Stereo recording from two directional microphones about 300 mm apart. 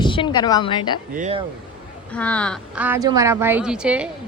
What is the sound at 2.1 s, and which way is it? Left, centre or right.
Speech, centre.